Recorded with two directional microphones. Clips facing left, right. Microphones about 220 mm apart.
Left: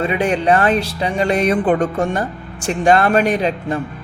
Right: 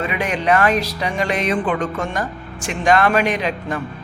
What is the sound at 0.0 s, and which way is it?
Speech, 30° left (ahead or behind).